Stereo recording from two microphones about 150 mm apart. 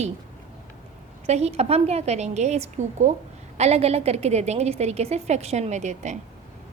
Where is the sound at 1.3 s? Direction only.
45° right (ahead or behind).